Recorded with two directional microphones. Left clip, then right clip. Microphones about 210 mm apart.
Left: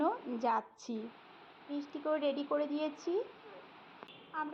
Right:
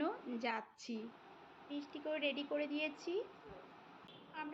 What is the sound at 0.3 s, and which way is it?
Speech, 65° left (ahead or behind).